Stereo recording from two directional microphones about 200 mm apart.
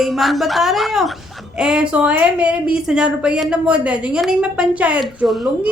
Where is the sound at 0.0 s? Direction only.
Centre (ahead or behind).